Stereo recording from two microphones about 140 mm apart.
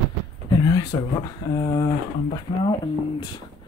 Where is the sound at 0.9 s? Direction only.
30° left (ahead or behind).